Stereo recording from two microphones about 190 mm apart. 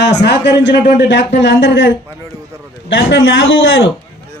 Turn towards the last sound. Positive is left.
turn(degrees=90)